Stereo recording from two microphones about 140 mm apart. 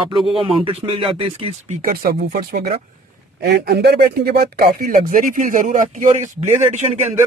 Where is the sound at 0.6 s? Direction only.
40° right (ahead or behind).